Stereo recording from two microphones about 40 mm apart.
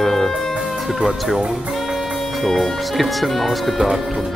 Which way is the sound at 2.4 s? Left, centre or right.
Centre.